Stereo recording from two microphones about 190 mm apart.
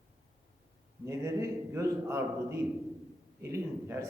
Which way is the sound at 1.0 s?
15° right (ahead or behind).